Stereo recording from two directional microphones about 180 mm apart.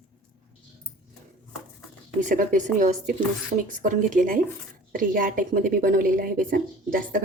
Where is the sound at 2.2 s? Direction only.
45° right (ahead or behind).